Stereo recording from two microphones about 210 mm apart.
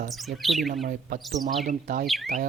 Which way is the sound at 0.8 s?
40° right (ahead or behind).